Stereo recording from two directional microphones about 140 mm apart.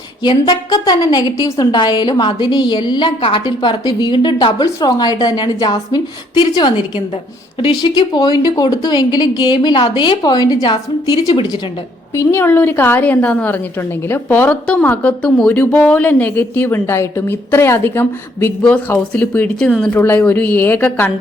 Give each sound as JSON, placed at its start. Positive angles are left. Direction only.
{"t": 0.2, "sound": "a woman's voice", "side_deg": 30}
{"t": 12.1, "sound": "a woman's voice", "side_deg": 15}